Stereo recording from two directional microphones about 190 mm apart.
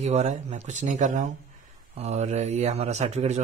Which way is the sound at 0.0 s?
35° right (ahead or behind).